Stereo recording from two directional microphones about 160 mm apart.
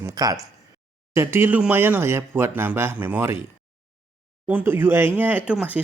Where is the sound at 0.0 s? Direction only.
20° right (ahead or behind).